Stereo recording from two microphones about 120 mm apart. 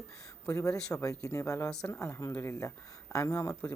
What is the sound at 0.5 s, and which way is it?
Speech, 25° left (ahead or behind).